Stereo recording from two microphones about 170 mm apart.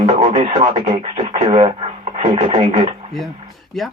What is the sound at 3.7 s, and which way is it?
Speech, centre (ahead or behind).